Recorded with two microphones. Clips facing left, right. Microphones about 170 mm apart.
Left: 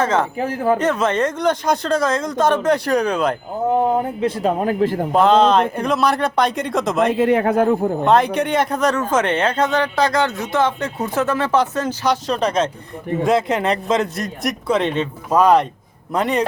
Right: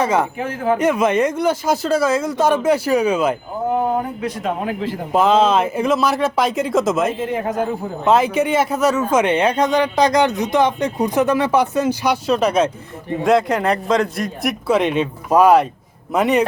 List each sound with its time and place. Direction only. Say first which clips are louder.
0.0 s speech: right 1 dB; 10° right (ahead or behind)
0.3 s speech: left 1 dB; 35° left (ahead or behind)
0.8 s a man's voice: right 2 dB; 10° right (ahead or behind)
3.8 s speech: left 3 dB; 30° left (ahead or behind); by 4.9 s 45° left (ahead or behind)
5.1 s a man's voice: even; 5° right (ahead or behind)
7.1 s speech: left 6 dB; 70° left (ahead or behind)
8.0 s speech: right 3 dB; 5° right (ahead or behind)
13.2 s a man's voice: right 2 dB; centre (ahead or behind)